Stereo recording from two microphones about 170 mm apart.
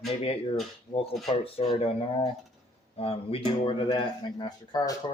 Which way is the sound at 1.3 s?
30° left (ahead or behind).